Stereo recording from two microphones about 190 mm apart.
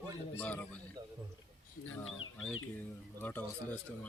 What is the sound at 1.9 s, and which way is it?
Speech, 90° left.